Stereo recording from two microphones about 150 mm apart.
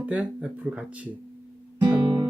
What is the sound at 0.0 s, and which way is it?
Speech, 10° right (ahead or behind).